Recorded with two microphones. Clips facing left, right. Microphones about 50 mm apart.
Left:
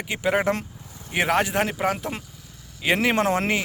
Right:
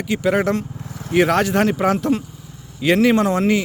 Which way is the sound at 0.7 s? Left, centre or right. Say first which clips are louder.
Right 10 dB; right.